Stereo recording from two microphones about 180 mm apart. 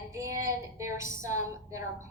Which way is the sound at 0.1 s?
15° right (ahead or behind).